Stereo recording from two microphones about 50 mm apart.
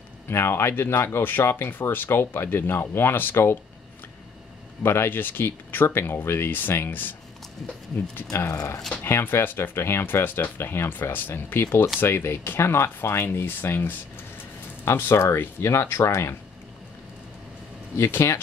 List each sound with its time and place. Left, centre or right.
0.3 s speech: left
4.8 s speech: left
8.3 s speech: left
9.0 s speech: left
11.6 s speech: left
13.3 s speech: left
15.0 s speech: left
15.6 s speech: left
17.9 s speech: left